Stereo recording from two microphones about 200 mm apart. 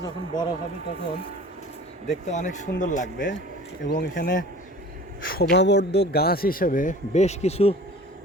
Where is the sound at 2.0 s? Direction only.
35° left (ahead or behind).